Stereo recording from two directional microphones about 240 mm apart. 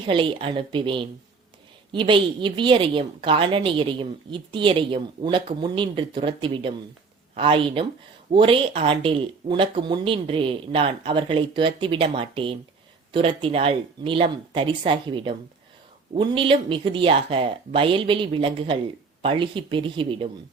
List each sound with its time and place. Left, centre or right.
0.0 s a woman's voice: centre